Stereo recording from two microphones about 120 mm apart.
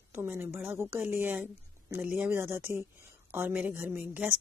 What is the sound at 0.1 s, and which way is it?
A woman's voice, 20° right (ahead or behind).